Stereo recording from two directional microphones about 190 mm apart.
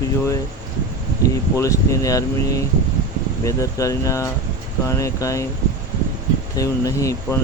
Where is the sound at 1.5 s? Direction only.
15° left (ahead or behind).